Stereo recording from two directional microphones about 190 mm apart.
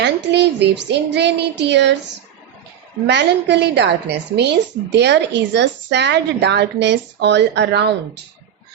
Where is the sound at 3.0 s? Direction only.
65° right (ahead or behind).